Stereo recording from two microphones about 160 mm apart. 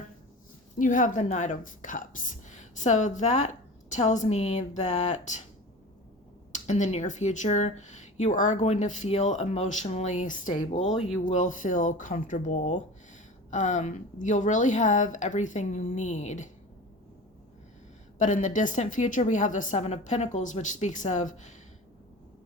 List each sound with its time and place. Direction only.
0.8 s speech: 55° left (ahead or behind)
6.5 s speech: 50° left (ahead or behind)
18.2 s speech: 50° left (ahead or behind)